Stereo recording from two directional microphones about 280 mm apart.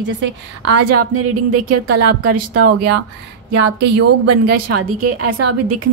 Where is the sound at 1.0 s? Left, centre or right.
Right.